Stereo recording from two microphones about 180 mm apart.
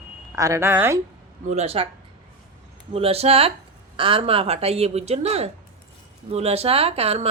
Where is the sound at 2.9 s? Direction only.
35° right (ahead or behind).